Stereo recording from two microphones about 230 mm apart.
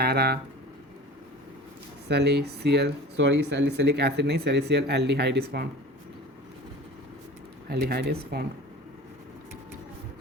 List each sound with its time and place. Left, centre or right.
0.0 s speech: right
2.0 s speech: right
7.7 s speech: right